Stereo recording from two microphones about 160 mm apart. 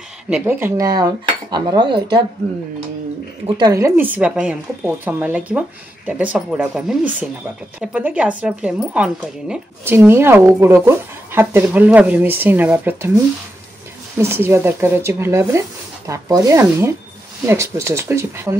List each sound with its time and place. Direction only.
0.3 s cutlery: 15° right (ahead or behind); by 2.2 s 30° right (ahead or behind)
3.4 s speech: 25° right (ahead or behind)
16.1 s cutlery: 20° right (ahead or behind)
17.5 s speech: 15° right (ahead or behind)